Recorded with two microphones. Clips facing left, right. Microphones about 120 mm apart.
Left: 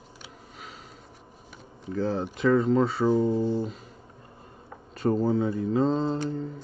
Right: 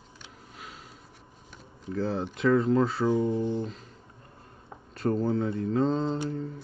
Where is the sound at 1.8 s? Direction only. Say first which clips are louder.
Left 2 dB; centre (ahead or behind).